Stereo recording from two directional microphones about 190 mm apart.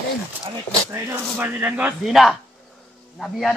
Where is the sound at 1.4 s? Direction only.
10° right (ahead or behind).